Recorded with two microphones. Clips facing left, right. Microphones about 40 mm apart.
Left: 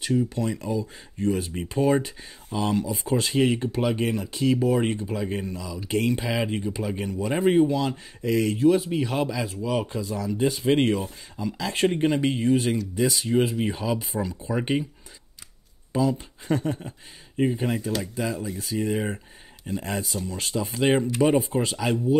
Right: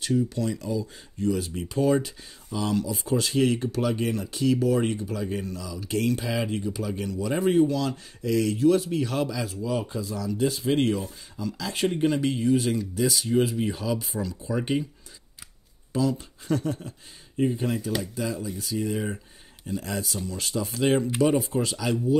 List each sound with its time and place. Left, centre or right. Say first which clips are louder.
0.0 s speech: left 1 dB; left
0.6 s speech: left 1 dB; left
9.7 s speech: left 2 dB; left
15.9 s speech: left 2 dB; left